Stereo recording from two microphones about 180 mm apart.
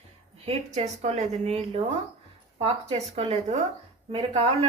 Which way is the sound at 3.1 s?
35° right (ahead or behind).